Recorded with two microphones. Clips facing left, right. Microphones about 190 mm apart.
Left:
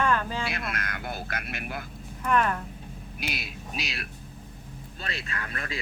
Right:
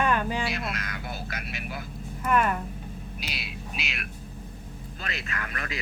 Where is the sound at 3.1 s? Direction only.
50° left (ahead or behind).